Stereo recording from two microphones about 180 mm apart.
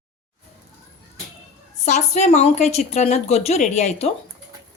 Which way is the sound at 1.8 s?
40° left (ahead or behind).